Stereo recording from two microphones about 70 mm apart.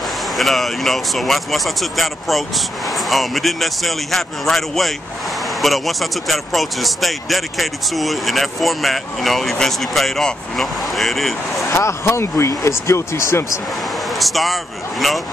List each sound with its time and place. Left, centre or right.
0.4 s speech: centre
11.7 s speech: left
14.0 s speech: centre